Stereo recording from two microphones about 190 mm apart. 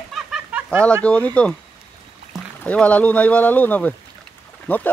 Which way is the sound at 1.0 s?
10° left (ahead or behind).